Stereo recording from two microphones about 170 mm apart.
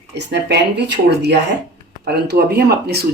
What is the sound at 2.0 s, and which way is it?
Speech, 70° right (ahead or behind).